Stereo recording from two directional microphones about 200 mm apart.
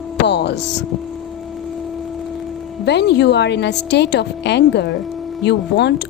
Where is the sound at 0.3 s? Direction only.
60° left (ahead or behind).